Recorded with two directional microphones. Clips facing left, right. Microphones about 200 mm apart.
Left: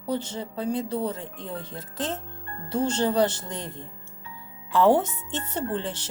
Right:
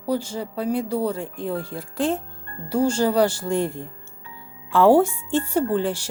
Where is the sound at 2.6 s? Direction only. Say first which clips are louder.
Right 4 dB; 10° right (ahead or behind).